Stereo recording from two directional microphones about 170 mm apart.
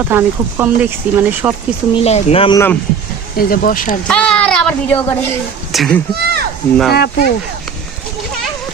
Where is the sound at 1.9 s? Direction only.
35° left (ahead or behind).